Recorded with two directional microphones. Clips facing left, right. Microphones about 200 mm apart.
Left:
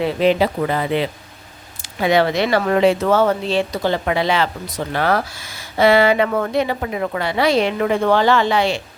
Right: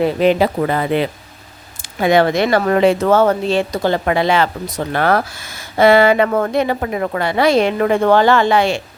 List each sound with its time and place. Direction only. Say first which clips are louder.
0.0 s speech: right 3 dB; 50° right (ahead or behind)